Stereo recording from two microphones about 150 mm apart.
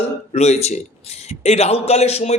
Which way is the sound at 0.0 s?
45° left (ahead or behind).